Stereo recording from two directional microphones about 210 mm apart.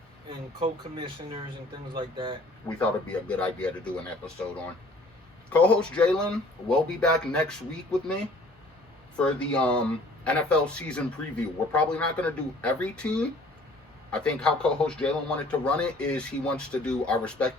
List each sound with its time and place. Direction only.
0.3 s speech: 25° right (ahead or behind)
2.6 s speech: 5° left (ahead or behind)
5.5 s speech: 5° left (ahead or behind)
9.1 s speech: 5° left (ahead or behind)